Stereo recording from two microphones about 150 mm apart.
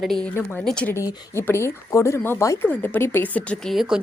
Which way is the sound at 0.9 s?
20° left (ahead or behind).